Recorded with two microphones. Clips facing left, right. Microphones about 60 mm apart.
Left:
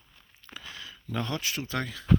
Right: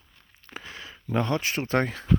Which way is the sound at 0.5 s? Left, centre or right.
Right.